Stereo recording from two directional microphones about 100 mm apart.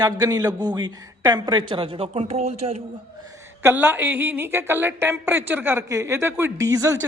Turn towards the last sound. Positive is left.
turn(degrees=-30)  # may be behind; listen again after turning